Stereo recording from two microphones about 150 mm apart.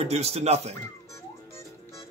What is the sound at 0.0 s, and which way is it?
Speech, 45° right (ahead or behind).